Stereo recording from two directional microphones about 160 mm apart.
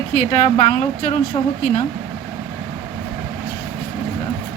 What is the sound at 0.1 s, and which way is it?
A woman's voice, 50° left (ahead or behind).